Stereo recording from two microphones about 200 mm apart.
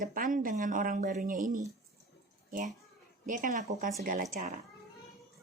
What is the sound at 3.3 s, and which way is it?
A woman's voice, 40° right (ahead or behind).